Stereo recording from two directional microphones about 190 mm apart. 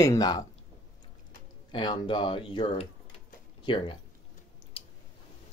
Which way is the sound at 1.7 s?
25° left (ahead or behind).